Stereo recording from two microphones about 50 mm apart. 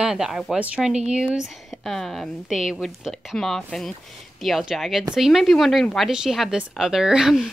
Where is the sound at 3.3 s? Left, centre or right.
Centre.